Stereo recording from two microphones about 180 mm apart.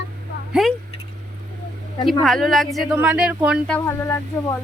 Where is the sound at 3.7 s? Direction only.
15° left (ahead or behind).